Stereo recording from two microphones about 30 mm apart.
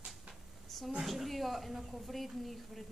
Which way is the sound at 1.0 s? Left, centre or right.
Centre.